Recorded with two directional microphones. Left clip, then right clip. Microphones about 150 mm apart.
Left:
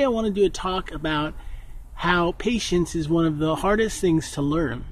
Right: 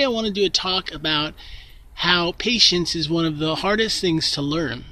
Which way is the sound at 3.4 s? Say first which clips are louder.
Right 1 dB; 20° right (ahead or behind).